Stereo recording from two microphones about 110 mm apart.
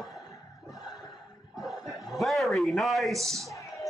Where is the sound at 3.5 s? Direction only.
30° left (ahead or behind).